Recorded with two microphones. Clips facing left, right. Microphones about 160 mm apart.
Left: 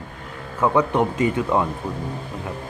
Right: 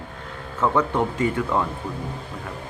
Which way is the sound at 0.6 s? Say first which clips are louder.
Left 2 dB; 15° left (ahead or behind).